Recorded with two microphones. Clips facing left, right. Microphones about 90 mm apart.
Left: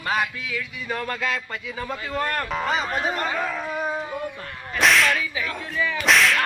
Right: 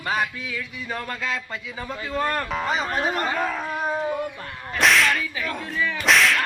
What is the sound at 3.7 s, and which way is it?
Dog, 5° right (ahead or behind).